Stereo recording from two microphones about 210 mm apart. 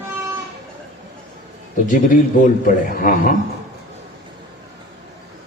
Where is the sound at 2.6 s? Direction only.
40° left (ahead or behind).